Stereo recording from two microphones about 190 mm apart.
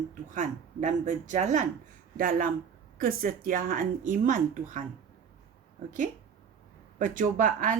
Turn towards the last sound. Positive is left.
turn(degrees=-45)  # may be behind; listen again after turning